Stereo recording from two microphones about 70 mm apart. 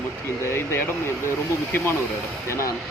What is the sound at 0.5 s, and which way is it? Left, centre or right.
Speech, left.